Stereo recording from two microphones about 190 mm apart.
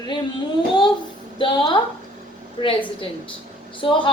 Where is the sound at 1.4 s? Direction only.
25° left (ahead or behind).